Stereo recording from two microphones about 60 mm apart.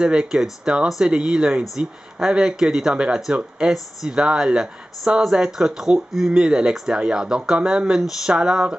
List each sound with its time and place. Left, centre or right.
0.0 s speech: centre